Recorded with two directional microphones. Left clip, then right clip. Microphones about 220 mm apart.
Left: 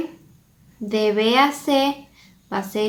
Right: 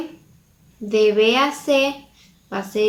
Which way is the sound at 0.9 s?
40° left (ahead or behind).